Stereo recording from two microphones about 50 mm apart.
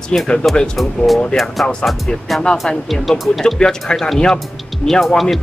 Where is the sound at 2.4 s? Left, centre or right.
Centre.